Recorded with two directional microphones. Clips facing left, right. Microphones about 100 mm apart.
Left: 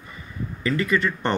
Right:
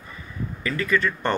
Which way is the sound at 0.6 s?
25° left (ahead or behind).